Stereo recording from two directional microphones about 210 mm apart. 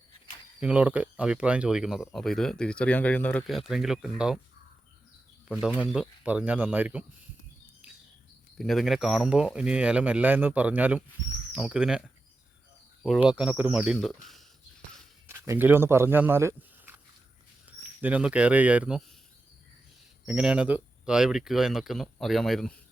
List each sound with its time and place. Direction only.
0.6 s speech: 5° right (ahead or behind)
5.5 s speech: 5° right (ahead or behind)
8.5 s speech: centre (ahead or behind)
13.0 s speech: 5° left (ahead or behind)
13.2 s speech: 5° right (ahead or behind)
15.3 s speech: 10° right (ahead or behind)
20.2 s speech: 5° right (ahead or behind)